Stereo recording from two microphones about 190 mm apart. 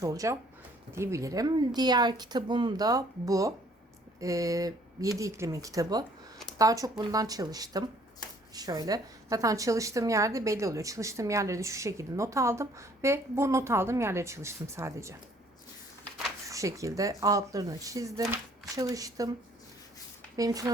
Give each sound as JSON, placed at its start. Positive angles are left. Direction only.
{"t": 0.0, "sound": "a woman's voice", "side_deg": -15}
{"t": 16.5, "sound": "a woman's voice", "side_deg": -15}
{"t": 20.3, "sound": "speech", "side_deg": -20}